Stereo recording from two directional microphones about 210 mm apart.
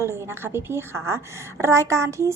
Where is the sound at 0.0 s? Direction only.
10° right (ahead or behind).